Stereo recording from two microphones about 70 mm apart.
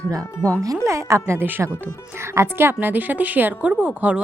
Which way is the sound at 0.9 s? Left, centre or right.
Right.